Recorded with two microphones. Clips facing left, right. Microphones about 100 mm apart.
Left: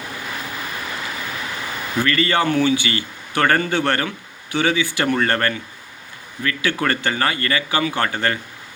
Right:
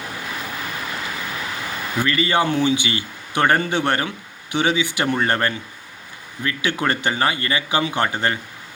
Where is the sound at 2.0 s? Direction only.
15° right (ahead or behind).